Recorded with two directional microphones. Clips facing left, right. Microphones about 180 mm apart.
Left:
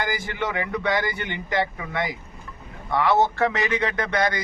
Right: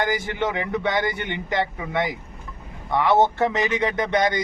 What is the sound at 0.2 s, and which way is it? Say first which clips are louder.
A man's voice: right 2 dB; 20° right (ahead or behind).